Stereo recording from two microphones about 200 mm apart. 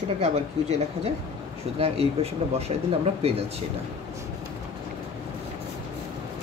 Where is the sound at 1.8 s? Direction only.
30° right (ahead or behind).